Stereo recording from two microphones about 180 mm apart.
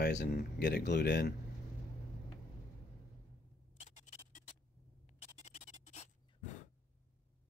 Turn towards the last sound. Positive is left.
turn(degrees=40)  # may be behind; listen again after turning